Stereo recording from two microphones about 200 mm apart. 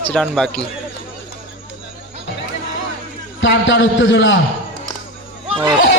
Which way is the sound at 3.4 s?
65° left (ahead or behind).